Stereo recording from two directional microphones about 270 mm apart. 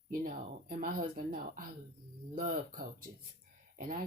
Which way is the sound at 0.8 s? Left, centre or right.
Right.